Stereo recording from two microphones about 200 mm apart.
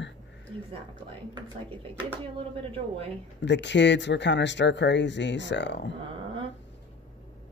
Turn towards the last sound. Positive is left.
turn(degrees=60)  # may be behind; listen again after turning